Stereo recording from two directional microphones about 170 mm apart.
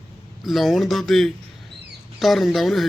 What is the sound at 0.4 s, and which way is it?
A man's voice, centre (ahead or behind).